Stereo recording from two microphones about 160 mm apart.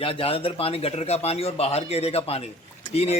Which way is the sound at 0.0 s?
35° left (ahead or behind).